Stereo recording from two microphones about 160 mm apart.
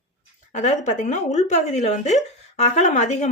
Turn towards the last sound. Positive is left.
turn(degrees=45)  # may be behind; listen again after turning